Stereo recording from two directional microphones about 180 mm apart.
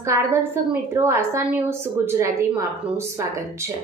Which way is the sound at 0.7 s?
10° right (ahead or behind).